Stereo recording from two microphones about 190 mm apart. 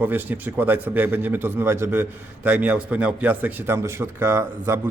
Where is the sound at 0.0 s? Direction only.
10° right (ahead or behind).